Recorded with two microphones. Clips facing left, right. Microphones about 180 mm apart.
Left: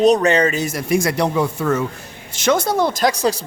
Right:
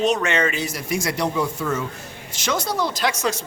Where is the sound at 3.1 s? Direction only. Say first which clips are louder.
Left 5 dB; 35° left (ahead or behind).